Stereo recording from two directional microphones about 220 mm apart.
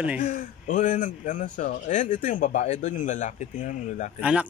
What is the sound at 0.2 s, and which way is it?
A man's voice, 35° left (ahead or behind).